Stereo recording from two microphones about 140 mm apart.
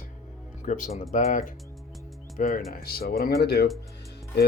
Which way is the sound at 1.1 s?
65° left (ahead or behind).